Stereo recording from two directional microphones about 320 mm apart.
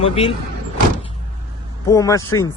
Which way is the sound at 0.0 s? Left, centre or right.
Centre.